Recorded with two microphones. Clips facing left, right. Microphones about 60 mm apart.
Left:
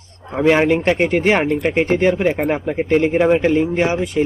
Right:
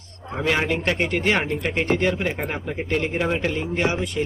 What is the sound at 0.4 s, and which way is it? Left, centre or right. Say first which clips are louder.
A man's voice: left 9 dB; left.